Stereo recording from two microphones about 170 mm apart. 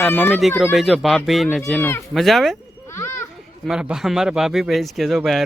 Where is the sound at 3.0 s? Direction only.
15° left (ahead or behind).